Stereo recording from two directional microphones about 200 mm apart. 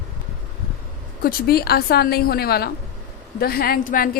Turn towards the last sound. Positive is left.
turn(degrees=45)  # may be behind; listen again after turning